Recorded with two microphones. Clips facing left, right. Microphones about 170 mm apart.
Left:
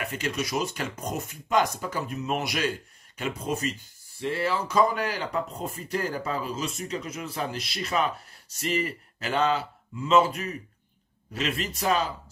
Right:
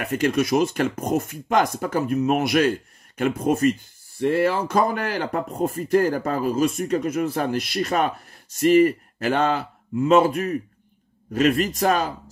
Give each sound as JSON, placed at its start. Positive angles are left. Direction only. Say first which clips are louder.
{"t": 0.0, "sound": "speech", "louder": "right 9 dB", "side_deg": -50}